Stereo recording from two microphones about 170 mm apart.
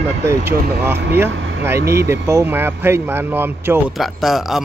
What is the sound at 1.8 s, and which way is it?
Speech, 70° right (ahead or behind).